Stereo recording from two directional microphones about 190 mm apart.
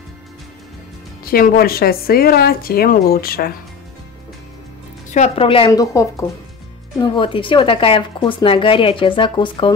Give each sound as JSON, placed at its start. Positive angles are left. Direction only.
{"t": 1.2, "sound": "speech", "side_deg": 50}
{"t": 5.1, "sound": "speech", "side_deg": 35}
{"t": 5.7, "sound": "a woman's voice", "side_deg": 15}